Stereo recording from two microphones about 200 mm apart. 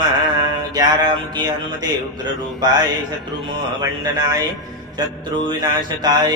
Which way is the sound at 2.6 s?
20° right (ahead or behind).